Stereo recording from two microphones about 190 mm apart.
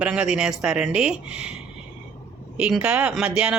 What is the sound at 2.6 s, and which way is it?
Speech, 5° right (ahead or behind).